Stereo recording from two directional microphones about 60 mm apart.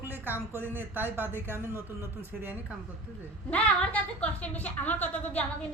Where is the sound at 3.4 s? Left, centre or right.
Left.